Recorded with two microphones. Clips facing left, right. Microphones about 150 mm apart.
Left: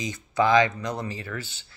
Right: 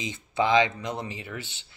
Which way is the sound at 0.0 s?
20° right (ahead or behind).